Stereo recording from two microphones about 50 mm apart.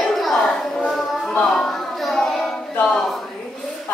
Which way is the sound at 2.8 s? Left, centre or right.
Centre.